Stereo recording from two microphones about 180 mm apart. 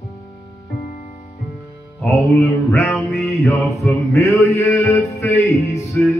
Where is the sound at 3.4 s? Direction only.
Centre (ahead or behind).